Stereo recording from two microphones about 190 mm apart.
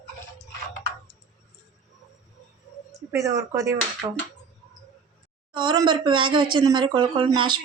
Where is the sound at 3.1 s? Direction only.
15° right (ahead or behind).